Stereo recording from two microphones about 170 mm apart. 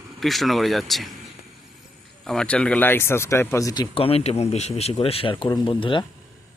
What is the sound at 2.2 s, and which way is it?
Speech, 5° left (ahead or behind).